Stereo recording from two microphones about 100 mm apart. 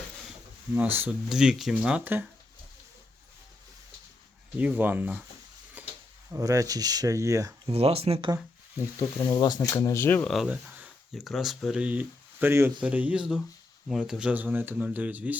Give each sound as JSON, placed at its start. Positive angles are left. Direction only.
{"t": 0.8, "sound": "speech", "side_deg": -20}
{"t": 1.3, "sound": "speech", "side_deg": -5}
{"t": 4.5, "sound": "speech", "side_deg": -15}
{"t": 5.8, "sound": "a sound", "side_deg": -15}
{"t": 6.3, "sound": "speech", "side_deg": -35}
{"t": 7.7, "sound": "speech", "side_deg": -90}
{"t": 8.8, "sound": "speech", "side_deg": 30}
{"t": 10.2, "sound": "speech", "side_deg": 0}
{"t": 10.5, "sound": "speech", "side_deg": -10}
{"t": 13.8, "sound": "speech", "side_deg": -5}